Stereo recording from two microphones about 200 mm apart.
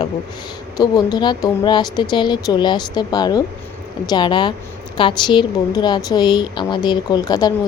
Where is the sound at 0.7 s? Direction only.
20° left (ahead or behind).